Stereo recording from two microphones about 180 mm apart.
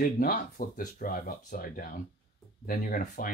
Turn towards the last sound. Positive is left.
turn(degrees=50)  # may be behind; listen again after turning